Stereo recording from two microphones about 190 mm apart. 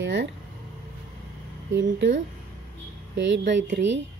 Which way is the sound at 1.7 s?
75° right (ahead or behind).